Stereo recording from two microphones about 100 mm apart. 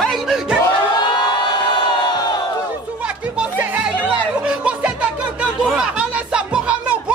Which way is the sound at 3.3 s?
15° right (ahead or behind).